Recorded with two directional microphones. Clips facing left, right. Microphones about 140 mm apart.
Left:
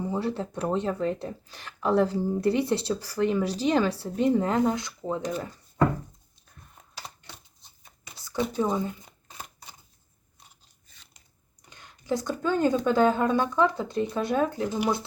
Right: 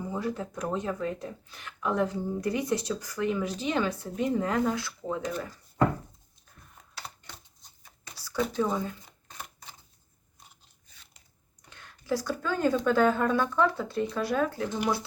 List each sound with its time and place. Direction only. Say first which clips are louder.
0.0 s speech: left 3 dB; 30° left (ahead or behind)
8.1 s speech: left 1 dB; 20° left (ahead or behind)
11.7 s speech: left 1 dB; 15° left (ahead or behind)